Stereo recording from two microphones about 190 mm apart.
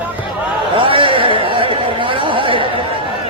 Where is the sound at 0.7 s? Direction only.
25° right (ahead or behind).